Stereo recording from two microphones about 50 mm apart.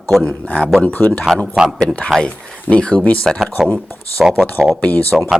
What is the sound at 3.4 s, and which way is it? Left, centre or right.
A man's voice, centre.